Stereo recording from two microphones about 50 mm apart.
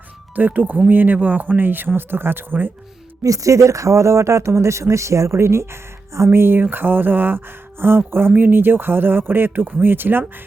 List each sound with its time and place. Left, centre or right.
0.3 s speech: right
3.4 s speech: right